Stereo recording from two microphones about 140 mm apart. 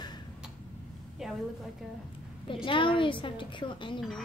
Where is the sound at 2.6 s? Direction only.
35° left (ahead or behind).